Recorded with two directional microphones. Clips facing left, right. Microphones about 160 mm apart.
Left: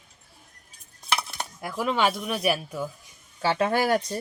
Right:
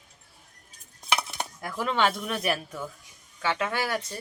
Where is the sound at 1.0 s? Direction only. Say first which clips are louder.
Even; 20° right (ahead or behind).